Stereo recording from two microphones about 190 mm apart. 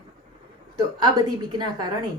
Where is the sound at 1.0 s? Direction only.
20° right (ahead or behind).